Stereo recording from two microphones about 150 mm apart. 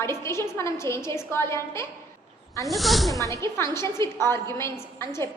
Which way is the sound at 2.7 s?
Centre (ahead or behind).